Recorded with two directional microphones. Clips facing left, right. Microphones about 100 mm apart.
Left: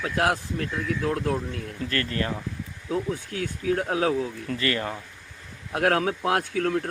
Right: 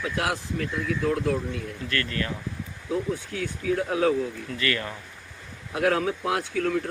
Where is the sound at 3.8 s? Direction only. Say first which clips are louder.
Right 3 dB; 50° left (ahead or behind).